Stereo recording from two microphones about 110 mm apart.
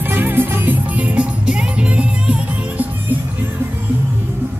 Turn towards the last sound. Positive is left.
turn(degrees=-10)  # may be behind; listen again after turning